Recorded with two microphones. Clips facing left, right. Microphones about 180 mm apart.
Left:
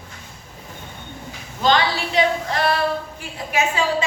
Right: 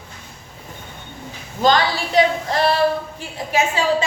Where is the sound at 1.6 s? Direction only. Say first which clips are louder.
Right 2 dB; 40° right (ahead or behind).